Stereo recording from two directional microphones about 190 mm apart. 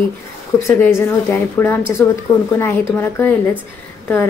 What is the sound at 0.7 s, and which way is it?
Speech, 10° left (ahead or behind).